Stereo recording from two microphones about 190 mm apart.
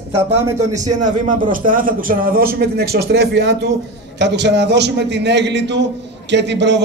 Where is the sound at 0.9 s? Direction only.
40° right (ahead or behind).